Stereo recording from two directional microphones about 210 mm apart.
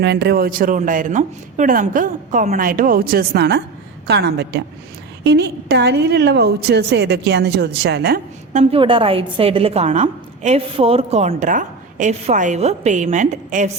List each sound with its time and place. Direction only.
0.0 s a woman's voice: 55° right (ahead or behind)
8.5 s a woman's voice: 25° right (ahead or behind)